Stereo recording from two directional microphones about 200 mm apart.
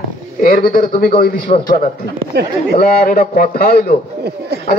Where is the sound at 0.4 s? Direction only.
45° left (ahead or behind).